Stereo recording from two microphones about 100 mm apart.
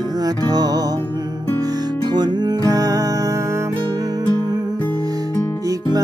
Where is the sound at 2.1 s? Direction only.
45° right (ahead or behind).